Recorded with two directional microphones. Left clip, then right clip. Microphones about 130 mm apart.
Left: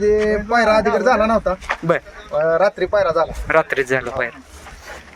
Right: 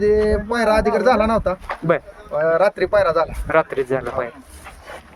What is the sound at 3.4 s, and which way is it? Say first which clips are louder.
Speech: left 2 dB; centre (ahead or behind).